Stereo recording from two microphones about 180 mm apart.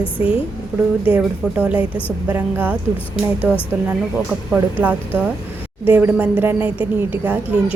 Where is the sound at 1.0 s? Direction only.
5° right (ahead or behind).